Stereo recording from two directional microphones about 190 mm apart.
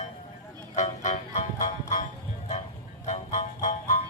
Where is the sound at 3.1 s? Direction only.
40° left (ahead or behind).